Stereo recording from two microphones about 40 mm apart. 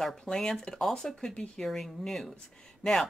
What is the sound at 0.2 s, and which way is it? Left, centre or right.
Speech, centre.